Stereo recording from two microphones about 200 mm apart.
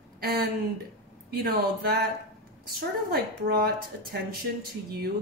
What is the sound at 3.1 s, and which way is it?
A woman's voice, 50° right (ahead or behind).